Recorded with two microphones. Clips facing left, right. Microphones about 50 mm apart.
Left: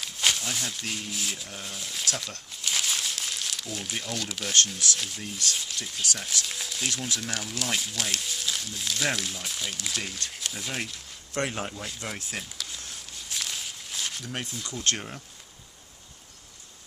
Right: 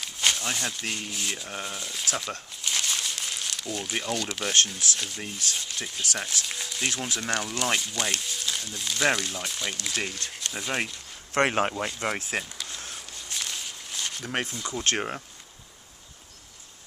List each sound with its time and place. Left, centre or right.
0.0 s speech: centre
2.0 s speech: centre
2.6 s crumpling: centre
4.0 s speech: centre
5.2 s speech: centre
6.4 s speech: centre
6.9 s speech: centre
7.2 s speech: centre
9.9 s speech: centre
11.3 s speech: right
11.9 s speech: right
12.4 s a sound: centre
13.1 s walk: centre
14.7 s speech: right